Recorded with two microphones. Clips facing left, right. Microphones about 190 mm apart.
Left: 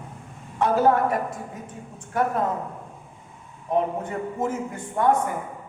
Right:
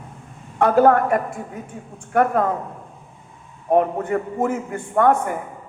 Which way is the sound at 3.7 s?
65° right (ahead or behind).